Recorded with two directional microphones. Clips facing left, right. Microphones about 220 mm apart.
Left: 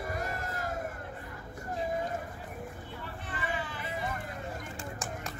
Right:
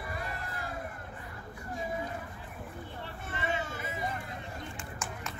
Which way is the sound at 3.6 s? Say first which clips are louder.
Right 1 dB; 45° right (ahead or behind).